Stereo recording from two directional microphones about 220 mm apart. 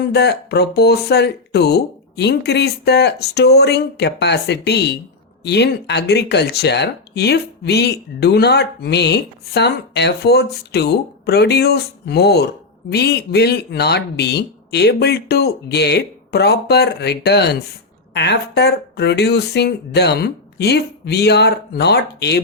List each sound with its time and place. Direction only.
0.0 s speech: 50° left (ahead or behind)